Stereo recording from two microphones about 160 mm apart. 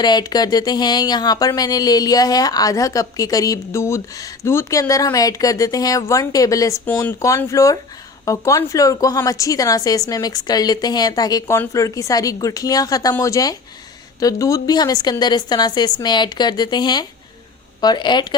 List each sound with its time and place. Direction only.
0.0 s speech: 25° left (ahead or behind)